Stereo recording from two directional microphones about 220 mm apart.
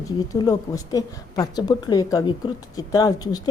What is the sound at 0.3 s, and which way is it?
A woman's voice, 15° left (ahead or behind).